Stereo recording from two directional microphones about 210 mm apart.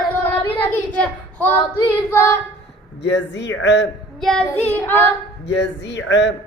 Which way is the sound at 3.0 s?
55° left (ahead or behind).